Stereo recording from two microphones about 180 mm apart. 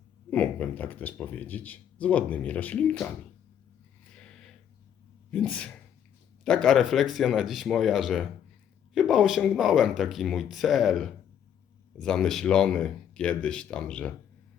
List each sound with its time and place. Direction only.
0.3 s speech: 10° left (ahead or behind)
4.1 s a sound: 5° left (ahead or behind)
5.3 s speech: 5° left (ahead or behind)